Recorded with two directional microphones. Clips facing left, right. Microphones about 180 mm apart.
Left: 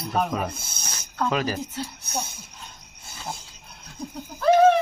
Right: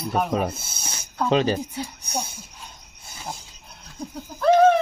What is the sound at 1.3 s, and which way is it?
Speech, 25° right (ahead or behind).